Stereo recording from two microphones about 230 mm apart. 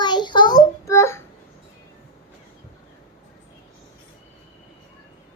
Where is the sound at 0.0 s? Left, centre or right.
Centre.